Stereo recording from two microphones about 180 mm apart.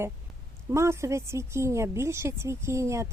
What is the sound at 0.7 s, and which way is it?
Speech, 15° right (ahead or behind).